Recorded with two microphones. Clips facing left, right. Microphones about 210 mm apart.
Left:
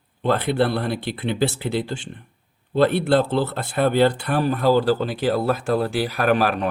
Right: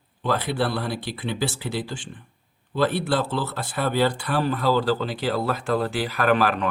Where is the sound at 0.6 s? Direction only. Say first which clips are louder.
Left 4 dB; 55° left (ahead or behind).